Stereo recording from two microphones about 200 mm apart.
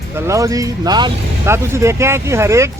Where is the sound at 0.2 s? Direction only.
15° right (ahead or behind).